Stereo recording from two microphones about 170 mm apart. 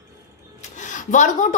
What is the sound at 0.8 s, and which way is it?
Speech, 45° left (ahead or behind).